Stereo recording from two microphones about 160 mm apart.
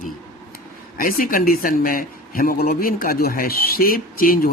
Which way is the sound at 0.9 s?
65° left (ahead or behind).